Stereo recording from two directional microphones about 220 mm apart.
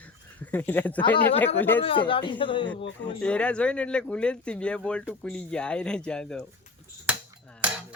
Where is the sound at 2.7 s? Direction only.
50° left (ahead or behind).